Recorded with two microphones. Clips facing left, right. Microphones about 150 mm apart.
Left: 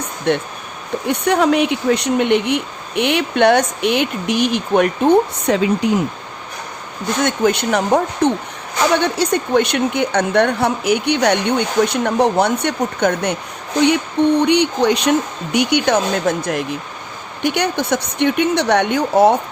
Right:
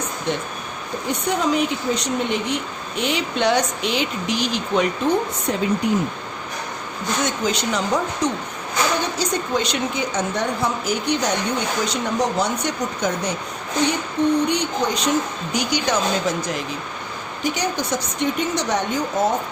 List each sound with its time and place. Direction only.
0.3 s a woman's voice: 60° left (ahead or behind)
5.5 s speech: 85° left
7.3 s a woman's voice: 60° left (ahead or behind)
9.0 s a woman's voice: 65° left (ahead or behind)
14.4 s speech: 70° left (ahead or behind)
15.5 s a woman's voice: 60° left (ahead or behind)